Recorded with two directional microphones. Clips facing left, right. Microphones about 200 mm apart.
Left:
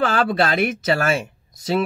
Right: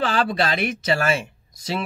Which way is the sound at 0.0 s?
55° left (ahead or behind).